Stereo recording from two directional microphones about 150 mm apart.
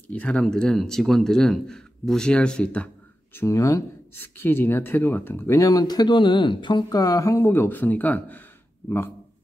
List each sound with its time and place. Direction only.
0.1 s speech: 10° left (ahead or behind)
3.3 s speech: 20° left (ahead or behind)